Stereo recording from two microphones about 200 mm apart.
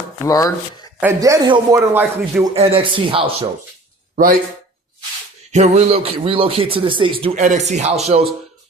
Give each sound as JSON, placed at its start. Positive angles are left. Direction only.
{"t": 0.3, "sound": "speech", "side_deg": 15}
{"t": 0.9, "sound": "speech", "side_deg": -10}
{"t": 1.7, "sound": "speech", "side_deg": -10}
{"t": 2.5, "sound": "speech", "side_deg": -25}
{"t": 4.1, "sound": "speech", "side_deg": -40}
{"t": 5.5, "sound": "speech", "side_deg": -35}